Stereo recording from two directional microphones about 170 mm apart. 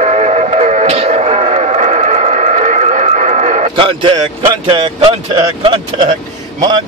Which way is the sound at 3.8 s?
30° right (ahead or behind).